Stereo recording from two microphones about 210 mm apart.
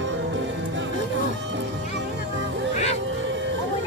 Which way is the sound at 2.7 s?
30° left (ahead or behind).